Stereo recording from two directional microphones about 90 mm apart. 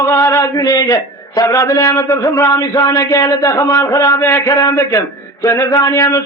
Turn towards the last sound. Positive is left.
turn(degrees=40)  # may be behind; listen again after turning